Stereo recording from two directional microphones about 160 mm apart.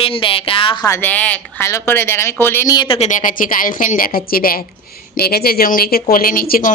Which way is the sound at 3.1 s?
55° left (ahead or behind).